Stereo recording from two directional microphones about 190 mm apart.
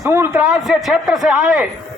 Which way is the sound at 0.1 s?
15° right (ahead or behind).